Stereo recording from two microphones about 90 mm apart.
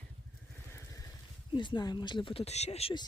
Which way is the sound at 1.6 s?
55° left (ahead or behind).